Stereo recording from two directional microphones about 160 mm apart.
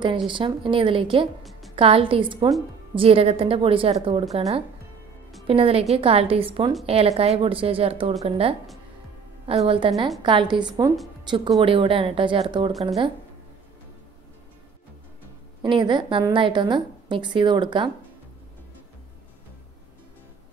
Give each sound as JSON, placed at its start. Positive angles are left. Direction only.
{"t": 0.3, "sound": "a woman's voice", "side_deg": -30}
{"t": 1.4, "sound": "music", "side_deg": 0}
{"t": 1.8, "sound": "a woman's voice", "side_deg": -35}
{"t": 9.7, "sound": "a woman's voice", "side_deg": -35}
{"t": 15.6, "sound": "a woman's voice", "side_deg": -30}